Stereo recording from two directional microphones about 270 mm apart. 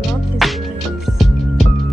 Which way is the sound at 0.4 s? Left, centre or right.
Centre.